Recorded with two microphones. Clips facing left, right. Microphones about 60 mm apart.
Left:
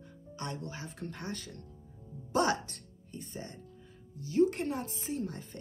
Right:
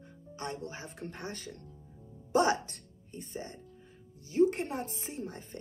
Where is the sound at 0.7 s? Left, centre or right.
Right.